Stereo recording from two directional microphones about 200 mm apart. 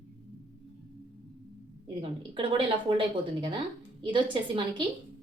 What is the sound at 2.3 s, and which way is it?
A woman's voice, 25° right (ahead or behind).